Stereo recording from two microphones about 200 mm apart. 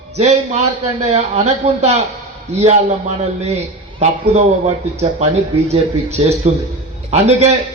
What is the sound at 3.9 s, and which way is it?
A man's voice, 30° right (ahead or behind).